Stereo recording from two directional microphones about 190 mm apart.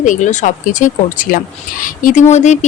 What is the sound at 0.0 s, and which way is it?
Speech, 40° left (ahead or behind).